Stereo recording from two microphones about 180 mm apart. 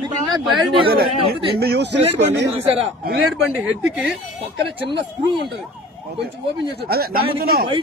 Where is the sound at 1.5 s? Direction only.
65° right (ahead or behind).